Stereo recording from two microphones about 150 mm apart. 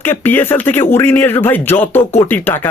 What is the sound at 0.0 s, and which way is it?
Speech, 15° left (ahead or behind).